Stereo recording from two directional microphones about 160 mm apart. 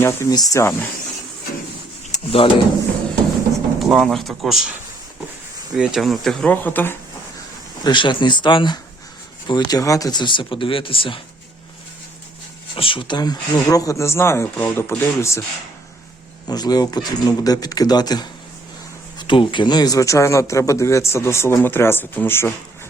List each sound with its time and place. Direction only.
0.0 s speech: 20° left (ahead or behind)
2.1 s drawer open or close: 35° left (ahead or behind)
3.8 s speech: centre (ahead or behind)
5.7 s speech: 5° right (ahead or behind)
7.9 s speech: 30° left (ahead or behind)
12.7 s speech: 35° left (ahead or behind); by 15.4 s 15° left (ahead or behind)
16.5 s speech: 25° left (ahead or behind)
19.3 s a man's voice: 30° left (ahead or behind); by 22.5 s 15° left (ahead or behind)